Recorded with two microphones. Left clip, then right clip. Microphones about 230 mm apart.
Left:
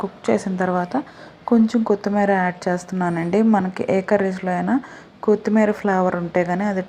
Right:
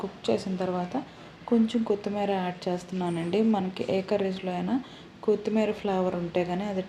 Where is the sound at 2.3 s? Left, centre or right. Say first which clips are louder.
Left 9 dB; left.